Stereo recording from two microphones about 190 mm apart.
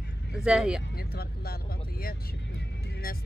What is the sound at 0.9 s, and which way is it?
Speech, 55° left (ahead or behind).